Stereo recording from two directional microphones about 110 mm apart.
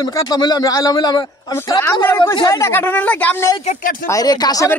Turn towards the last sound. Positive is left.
turn(degrees=35)  # may be behind; listen again after turning